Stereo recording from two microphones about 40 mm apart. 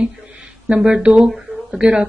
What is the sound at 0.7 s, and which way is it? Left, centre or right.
Speech, centre.